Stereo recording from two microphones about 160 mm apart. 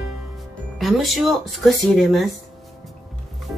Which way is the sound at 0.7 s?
Centre (ahead or behind).